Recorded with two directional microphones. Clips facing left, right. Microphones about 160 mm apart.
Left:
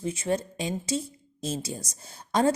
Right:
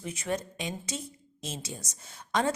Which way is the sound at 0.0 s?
30° left (ahead or behind).